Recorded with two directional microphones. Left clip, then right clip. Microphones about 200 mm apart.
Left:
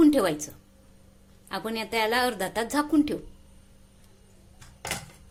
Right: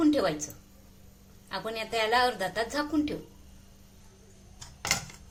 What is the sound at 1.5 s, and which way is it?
A woman's voice, 45° left (ahead or behind).